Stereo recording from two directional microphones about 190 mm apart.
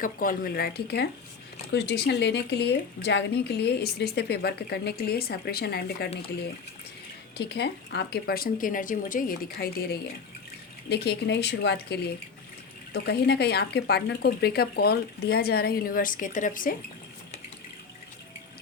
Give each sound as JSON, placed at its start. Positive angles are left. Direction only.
{"t": 0.0, "sound": "speech", "side_deg": 45}
{"t": 7.3, "sound": "speech", "side_deg": 60}